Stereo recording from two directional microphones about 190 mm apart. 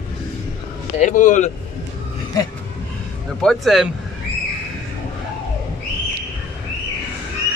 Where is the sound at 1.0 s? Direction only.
40° left (ahead or behind).